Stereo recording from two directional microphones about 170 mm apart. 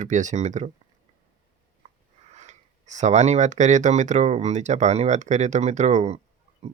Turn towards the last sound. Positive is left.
turn(degrees=-40)  # may be behind; listen again after turning